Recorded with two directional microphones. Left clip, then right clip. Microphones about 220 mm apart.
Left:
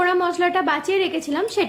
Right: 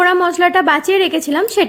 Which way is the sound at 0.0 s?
35° right (ahead or behind).